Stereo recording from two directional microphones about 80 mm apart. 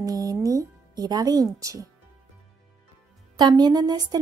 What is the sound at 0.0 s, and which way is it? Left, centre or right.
Music, right.